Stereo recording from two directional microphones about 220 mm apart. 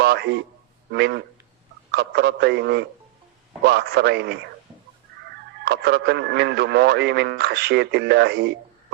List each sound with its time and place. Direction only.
0.0 s a sound: 50° right (ahead or behind)
0.9 s speech: 50° right (ahead or behind)
5.6 s speech: 50° right (ahead or behind)